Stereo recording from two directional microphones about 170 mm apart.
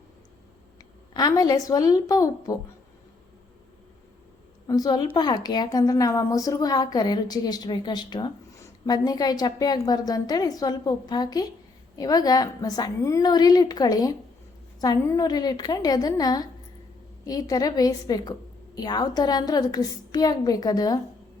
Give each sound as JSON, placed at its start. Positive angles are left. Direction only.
{"t": 1.1, "sound": "a woman's voice", "side_deg": 20}
{"t": 4.6, "sound": "a woman's voice", "side_deg": 20}